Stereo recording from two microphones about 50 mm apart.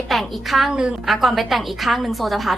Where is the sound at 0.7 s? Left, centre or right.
Centre.